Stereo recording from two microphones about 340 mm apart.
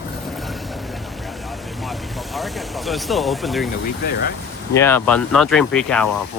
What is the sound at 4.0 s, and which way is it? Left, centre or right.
Speech, left.